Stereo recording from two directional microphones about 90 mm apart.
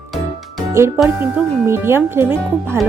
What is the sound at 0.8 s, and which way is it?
Speech, 30° right (ahead or behind).